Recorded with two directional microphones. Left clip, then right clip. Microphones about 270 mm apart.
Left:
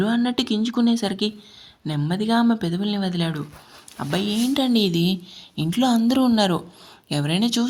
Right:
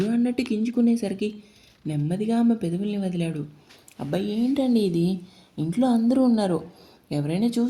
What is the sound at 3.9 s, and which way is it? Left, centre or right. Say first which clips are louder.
Speech: left 3 dB; left.